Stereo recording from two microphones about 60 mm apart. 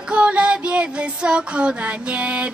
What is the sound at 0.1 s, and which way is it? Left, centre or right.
Music, right.